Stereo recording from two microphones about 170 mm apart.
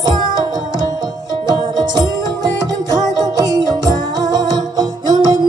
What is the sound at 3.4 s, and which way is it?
Music, 25° right (ahead or behind).